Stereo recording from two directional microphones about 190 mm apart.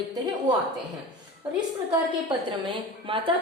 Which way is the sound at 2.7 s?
30° right (ahead or behind).